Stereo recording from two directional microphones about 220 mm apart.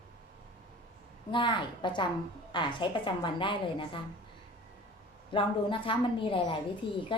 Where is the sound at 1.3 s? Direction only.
20° left (ahead or behind).